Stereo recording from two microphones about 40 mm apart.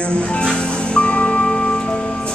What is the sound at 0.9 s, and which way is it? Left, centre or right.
Music, left.